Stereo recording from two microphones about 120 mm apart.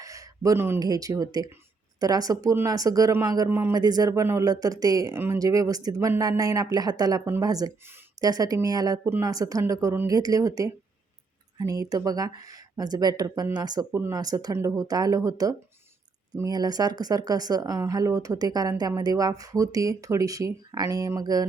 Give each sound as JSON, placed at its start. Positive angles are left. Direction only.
{"t": 0.0, "sound": "a sound", "side_deg": -30}
{"t": 0.8, "sound": "speech", "side_deg": -30}
{"t": 3.5, "sound": "speech", "side_deg": -20}
{"t": 3.8, "sound": "speech", "side_deg": -30}